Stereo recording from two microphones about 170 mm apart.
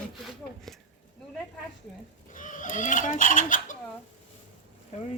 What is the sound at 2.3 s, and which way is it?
Speech, 50° left (ahead or behind).